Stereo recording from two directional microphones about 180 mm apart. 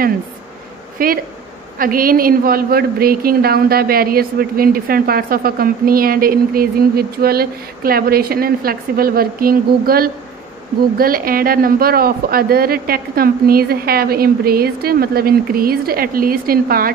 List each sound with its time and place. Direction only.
0.9 s a woman's voice: 55° right (ahead or behind)